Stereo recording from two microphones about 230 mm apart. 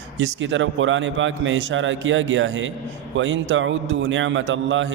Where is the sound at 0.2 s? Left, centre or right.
Right.